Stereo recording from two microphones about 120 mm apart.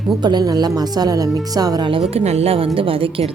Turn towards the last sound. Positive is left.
turn(degrees=-50)  # may be behind; listen again after turning